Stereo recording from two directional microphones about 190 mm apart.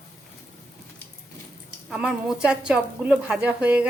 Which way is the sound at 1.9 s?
5° right (ahead or behind).